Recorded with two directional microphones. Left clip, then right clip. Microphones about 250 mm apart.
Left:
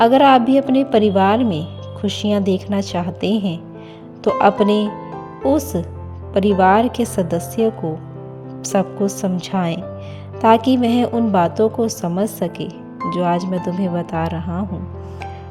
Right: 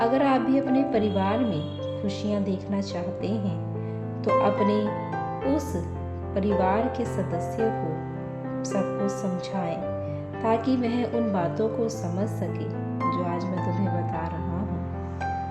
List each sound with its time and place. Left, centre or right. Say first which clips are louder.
0.0 s a woman's voice: left 11 dB; left